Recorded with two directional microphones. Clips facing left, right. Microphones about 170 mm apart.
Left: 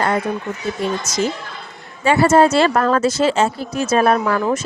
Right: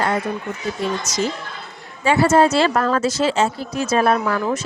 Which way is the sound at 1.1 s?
50° left (ahead or behind).